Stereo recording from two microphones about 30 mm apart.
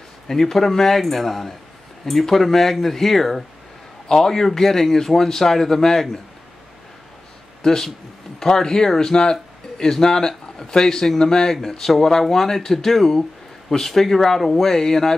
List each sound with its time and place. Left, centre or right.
0.3 s a man's voice: centre
4.1 s a man's voice: centre
7.6 s a man's voice: centre